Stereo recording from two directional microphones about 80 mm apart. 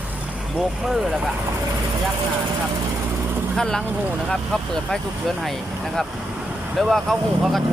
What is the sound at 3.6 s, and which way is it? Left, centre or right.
Speech, centre.